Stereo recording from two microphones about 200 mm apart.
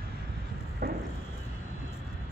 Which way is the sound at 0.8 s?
50° right (ahead or behind).